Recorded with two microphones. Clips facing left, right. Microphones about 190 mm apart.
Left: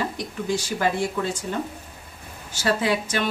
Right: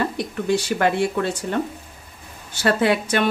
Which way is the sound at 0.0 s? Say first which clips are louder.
Right 4 dB; 65° right (ahead or behind).